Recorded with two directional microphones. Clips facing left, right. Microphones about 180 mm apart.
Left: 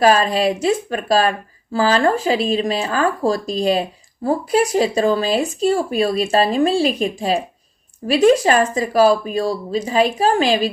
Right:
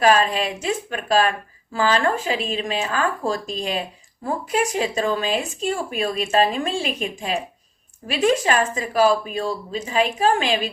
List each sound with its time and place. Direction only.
0.0 s speech: 35° left (ahead or behind)